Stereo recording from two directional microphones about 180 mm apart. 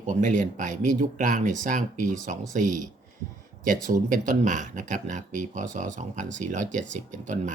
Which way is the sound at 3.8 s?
45° right (ahead or behind).